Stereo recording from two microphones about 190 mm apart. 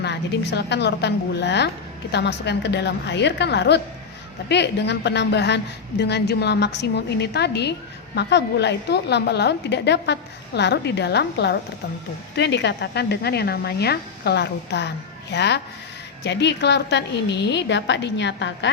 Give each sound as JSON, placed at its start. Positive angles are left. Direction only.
{"t": 0.0, "sound": "a woman's voice", "side_deg": 65}